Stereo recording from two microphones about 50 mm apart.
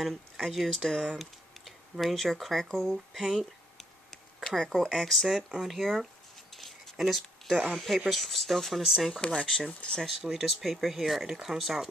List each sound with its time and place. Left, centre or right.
0.1 s speech: centre
1.1 s speech: centre
3.1 s speech: centre
4.5 s speech: centre
5.5 s speech: centre
5.8 s speech: centre
6.5 s a sound: centre
7.7 s speech: centre
9.2 s speech: left
10.0 s speech: centre